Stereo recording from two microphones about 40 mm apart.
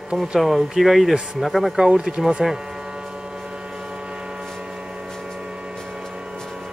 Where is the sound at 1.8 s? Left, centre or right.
Centre.